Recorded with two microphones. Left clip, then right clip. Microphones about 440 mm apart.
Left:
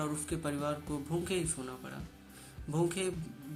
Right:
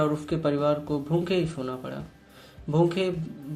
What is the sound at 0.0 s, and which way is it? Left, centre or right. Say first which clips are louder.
Speech: right 11 dB; left.